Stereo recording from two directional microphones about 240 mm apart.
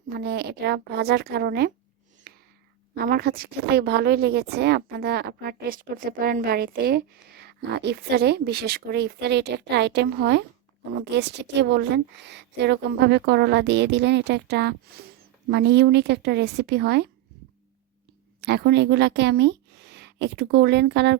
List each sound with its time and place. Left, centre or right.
0.2 s a woman's voice: right
2.3 s a sound: right
2.9 s a woman's voice: right
18.3 s speech: right